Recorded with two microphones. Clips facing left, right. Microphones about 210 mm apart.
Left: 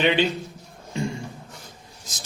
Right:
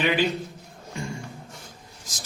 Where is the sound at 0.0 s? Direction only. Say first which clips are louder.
Left 3 dB; 25° left (ahead or behind).